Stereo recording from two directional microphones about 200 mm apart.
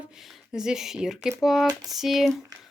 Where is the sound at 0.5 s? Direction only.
5° right (ahead or behind).